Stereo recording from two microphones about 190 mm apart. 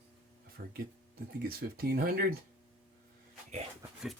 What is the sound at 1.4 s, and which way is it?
Speech, 55° right (ahead or behind).